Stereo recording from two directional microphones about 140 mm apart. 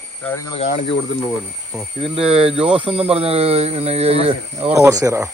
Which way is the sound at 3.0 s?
45° right (ahead or behind).